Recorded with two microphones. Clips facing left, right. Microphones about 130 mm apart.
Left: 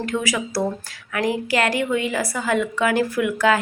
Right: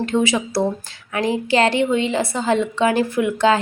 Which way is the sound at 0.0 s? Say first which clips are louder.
Right 5 dB; 25° right (ahead or behind).